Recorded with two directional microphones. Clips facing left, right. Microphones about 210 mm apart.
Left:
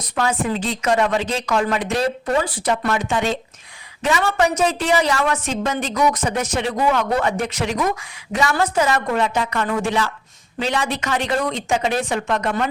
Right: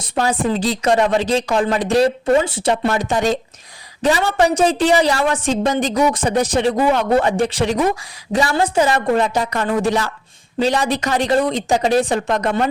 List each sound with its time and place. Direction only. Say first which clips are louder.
0.0 s speech: right 3 dB; 30° right (ahead or behind)